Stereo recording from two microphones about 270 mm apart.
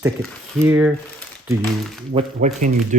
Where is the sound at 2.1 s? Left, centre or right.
Right.